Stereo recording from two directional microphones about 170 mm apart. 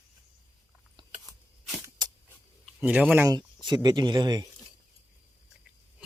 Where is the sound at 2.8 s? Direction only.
10° right (ahead or behind).